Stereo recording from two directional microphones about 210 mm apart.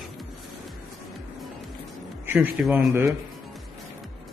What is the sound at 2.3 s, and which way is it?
Speech, 10° right (ahead or behind).